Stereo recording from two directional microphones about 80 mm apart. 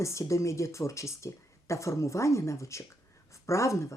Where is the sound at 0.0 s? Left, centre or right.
Left.